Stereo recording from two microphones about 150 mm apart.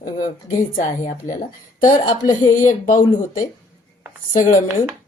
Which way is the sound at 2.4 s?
60° left (ahead or behind).